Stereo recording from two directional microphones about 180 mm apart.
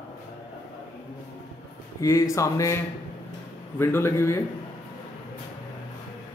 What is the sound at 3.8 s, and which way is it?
Speech, 15° left (ahead or behind).